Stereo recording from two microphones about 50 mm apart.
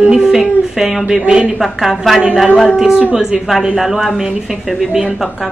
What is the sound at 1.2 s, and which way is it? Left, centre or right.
Speech, right.